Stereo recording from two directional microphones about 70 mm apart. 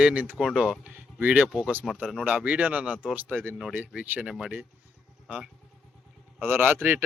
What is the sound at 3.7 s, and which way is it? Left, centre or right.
Speech, right.